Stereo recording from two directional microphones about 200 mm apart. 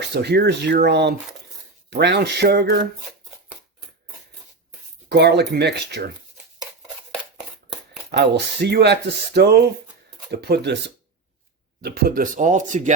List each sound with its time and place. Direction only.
0.0 s speech: 55° right (ahead or behind)
5.0 s speech: 55° right (ahead or behind)
8.6 s speech: 55° right (ahead or behind); by 12.9 s 40° right (ahead or behind)